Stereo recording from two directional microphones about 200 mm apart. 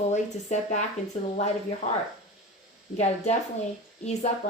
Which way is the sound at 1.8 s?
30° left (ahead or behind).